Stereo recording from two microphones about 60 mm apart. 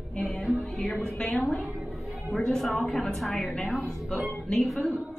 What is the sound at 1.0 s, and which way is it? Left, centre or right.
Speech, centre.